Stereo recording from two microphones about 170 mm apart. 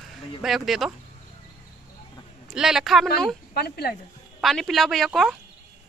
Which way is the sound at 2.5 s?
5° right (ahead or behind).